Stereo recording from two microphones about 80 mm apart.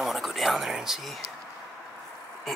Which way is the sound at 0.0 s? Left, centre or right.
Centre.